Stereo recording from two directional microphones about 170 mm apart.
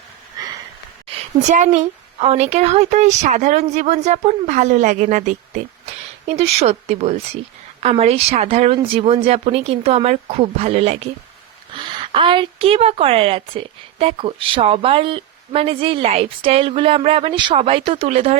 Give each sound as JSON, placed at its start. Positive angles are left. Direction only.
{"t": 1.0, "sound": "a woman's voice", "side_deg": -45}